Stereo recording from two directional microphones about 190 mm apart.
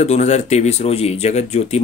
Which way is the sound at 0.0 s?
35° left (ahead or behind).